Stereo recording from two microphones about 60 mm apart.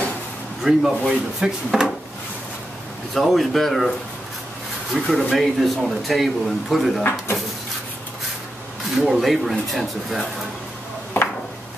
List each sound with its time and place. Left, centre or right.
0.7 s speech: centre
3.2 s speech: centre
4.9 s speech: centre
7.0 s speech: left
8.9 s speech: centre